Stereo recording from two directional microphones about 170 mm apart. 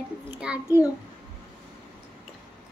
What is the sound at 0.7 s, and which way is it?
Child singing, 10° right (ahead or behind).